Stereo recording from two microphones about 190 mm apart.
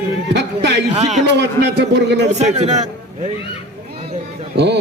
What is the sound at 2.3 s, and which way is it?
Speech, 35° right (ahead or behind).